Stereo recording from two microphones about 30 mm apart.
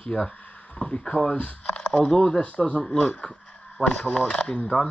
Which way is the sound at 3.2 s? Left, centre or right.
Left.